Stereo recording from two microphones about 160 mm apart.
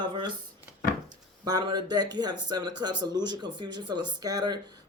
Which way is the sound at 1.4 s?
25° right (ahead or behind).